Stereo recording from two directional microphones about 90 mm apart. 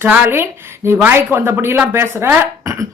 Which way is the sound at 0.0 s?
25° right (ahead or behind).